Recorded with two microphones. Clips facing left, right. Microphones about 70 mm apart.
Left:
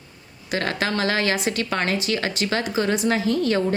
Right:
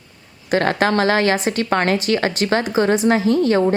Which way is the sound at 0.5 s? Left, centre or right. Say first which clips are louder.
Right 7 dB; right.